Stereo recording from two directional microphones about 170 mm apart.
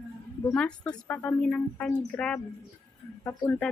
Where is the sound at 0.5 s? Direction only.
5° left (ahead or behind).